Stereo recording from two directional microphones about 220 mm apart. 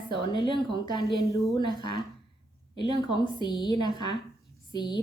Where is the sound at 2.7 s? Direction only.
20° left (ahead or behind).